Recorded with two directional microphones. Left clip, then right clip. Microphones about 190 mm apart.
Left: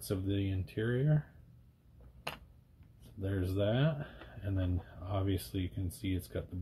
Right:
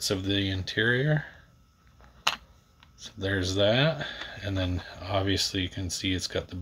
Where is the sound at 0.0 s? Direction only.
15° right (ahead or behind).